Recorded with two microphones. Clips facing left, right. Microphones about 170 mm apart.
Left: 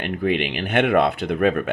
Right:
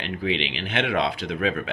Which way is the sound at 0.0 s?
55° left (ahead or behind).